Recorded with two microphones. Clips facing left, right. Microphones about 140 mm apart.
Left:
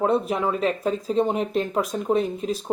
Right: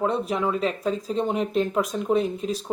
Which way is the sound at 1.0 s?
Centre (ahead or behind).